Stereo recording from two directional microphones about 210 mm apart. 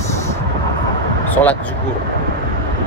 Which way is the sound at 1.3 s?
10° left (ahead or behind).